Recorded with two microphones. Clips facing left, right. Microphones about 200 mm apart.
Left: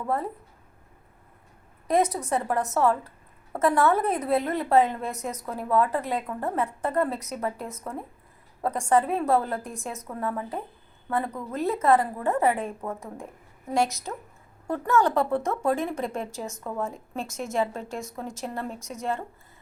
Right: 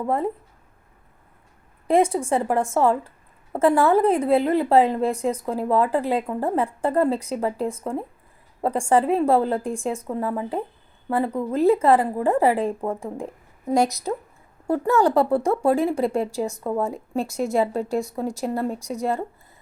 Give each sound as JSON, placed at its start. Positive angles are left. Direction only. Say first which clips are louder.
{"t": 0.0, "sound": "a woman's voice", "louder": "right 5 dB", "side_deg": -25}
{"t": 1.9, "sound": "a woman's voice", "louder": "right 5 dB", "side_deg": -30}